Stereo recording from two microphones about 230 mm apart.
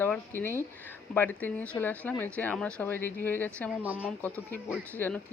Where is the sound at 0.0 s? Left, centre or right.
Centre.